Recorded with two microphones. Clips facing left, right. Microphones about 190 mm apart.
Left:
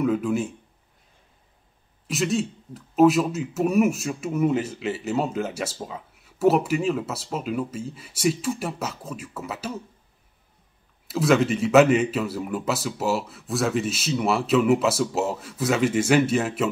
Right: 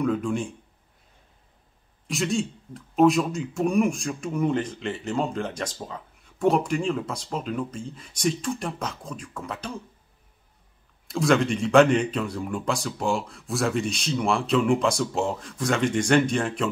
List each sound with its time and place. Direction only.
0.0 s speech: 5° left (ahead or behind)
2.0 s speech: centre (ahead or behind)
11.1 s speech: 5° left (ahead or behind)